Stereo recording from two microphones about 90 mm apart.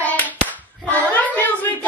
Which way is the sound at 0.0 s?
15° left (ahead or behind).